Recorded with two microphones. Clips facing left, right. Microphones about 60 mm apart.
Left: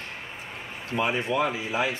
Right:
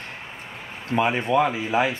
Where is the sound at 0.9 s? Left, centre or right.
Right.